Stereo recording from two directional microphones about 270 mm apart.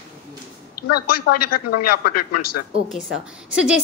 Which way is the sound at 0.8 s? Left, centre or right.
Left.